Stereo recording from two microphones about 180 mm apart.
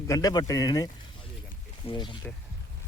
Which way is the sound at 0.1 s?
20° left (ahead or behind).